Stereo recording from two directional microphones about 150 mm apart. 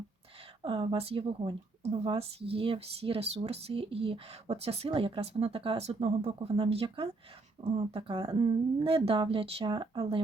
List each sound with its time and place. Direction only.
0.6 s speech: 35° right (ahead or behind)